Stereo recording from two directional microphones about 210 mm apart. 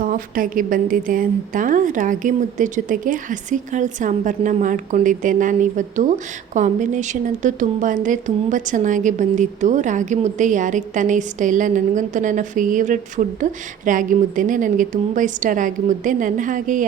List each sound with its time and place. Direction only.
0.0 s a woman's voice: 40° right (ahead or behind)